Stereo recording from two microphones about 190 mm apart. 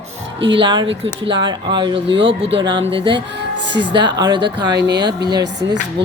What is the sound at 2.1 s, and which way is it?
Speech, 75° right (ahead or behind).